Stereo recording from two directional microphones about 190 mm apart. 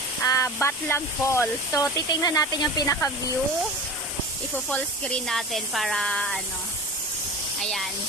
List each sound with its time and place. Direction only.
0.2 s speech: 15° left (ahead or behind)
4.7 s speech: 5° left (ahead or behind)
7.6 s speech: centre (ahead or behind)